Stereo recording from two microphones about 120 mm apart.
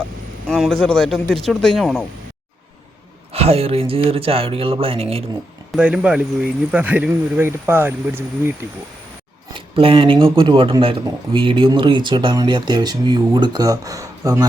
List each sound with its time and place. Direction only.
0.4 s a man's voice: 5° left (ahead or behind)
3.3 s speech: 55° right (ahead or behind)
5.7 s speech: 10° right (ahead or behind)
9.6 s speech: 50° right (ahead or behind); by 14.4 s 30° right (ahead or behind)